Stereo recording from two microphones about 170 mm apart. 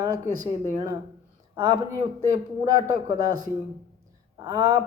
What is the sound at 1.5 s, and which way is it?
Speech, 25° right (ahead or behind).